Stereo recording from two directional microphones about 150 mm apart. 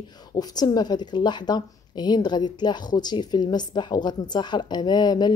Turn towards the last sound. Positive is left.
turn(degrees=30)  # may be behind; listen again after turning